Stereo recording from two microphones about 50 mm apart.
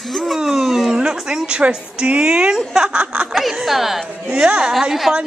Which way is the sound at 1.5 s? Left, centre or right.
Right.